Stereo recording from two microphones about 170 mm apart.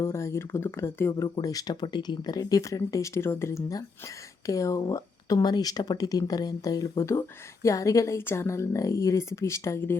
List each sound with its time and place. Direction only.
0.0 s speech: 15° left (ahead or behind)